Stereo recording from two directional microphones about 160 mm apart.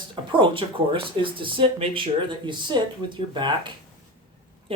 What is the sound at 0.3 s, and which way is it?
Speech, 30° right (ahead or behind).